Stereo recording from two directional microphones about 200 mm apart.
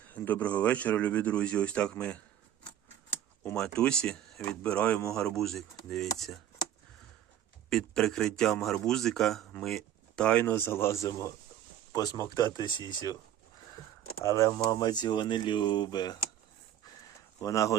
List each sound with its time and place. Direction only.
0.1 s speech: 10° left (ahead or behind)
3.4 s speech: 5° left (ahead or behind)
7.7 s speech: 5° left (ahead or behind)
14.3 s speech: 15° left (ahead or behind)
17.4 s speech: 15° left (ahead or behind)